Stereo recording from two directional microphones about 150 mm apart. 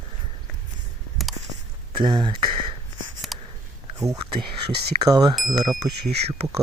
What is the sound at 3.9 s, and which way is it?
Speech, 25° right (ahead or behind).